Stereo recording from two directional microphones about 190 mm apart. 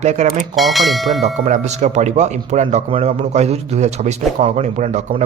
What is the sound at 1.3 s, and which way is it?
Speech, 40° right (ahead or behind).